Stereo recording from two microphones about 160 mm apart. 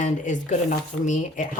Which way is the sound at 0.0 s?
50° left (ahead or behind).